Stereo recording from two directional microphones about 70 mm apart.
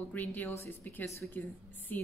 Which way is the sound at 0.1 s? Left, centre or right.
Left.